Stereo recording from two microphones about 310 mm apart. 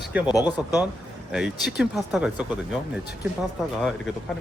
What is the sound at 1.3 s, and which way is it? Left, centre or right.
Speech, centre.